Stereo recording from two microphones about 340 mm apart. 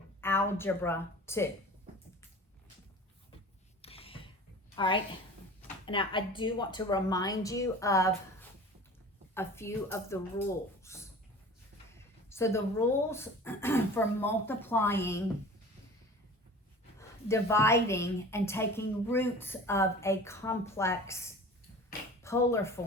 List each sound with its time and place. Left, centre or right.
0.2 s a woman's voice: centre
3.8 s a sound: centre
5.8 s a woman's voice: centre
10.8 s a sound: centre
12.3 s a woman's voice: centre
17.0 s a woman's voice: centre
22.2 s speech: centre